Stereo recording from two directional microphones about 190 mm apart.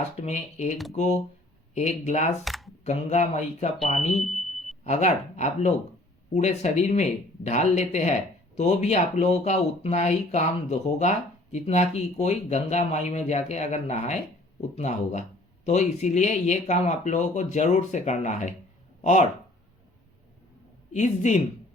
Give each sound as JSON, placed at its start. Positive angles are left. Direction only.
{"t": 0.2, "sound": "speech", "side_deg": 35}
{"t": 2.4, "sound": "camera", "side_deg": 0}
{"t": 2.8, "sound": "speech", "side_deg": 35}
{"t": 4.2, "sound": "smoke detector", "side_deg": 0}
{"t": 4.8, "sound": "speech", "side_deg": 35}
{"t": 20.9, "sound": "speech", "side_deg": 40}